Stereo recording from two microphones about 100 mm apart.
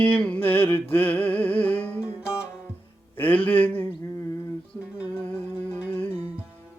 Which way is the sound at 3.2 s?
15° left (ahead or behind).